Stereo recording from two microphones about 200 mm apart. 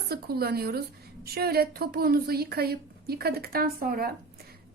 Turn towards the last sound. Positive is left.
turn(degrees=-45)  # may be behind; listen again after turning